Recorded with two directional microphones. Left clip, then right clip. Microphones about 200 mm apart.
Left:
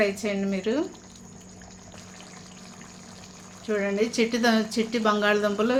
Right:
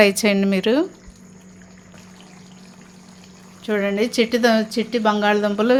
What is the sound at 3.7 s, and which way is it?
Speech, 45° right (ahead or behind).